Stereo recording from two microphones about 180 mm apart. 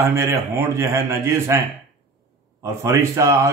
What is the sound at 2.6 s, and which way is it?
Speech, 15° right (ahead or behind).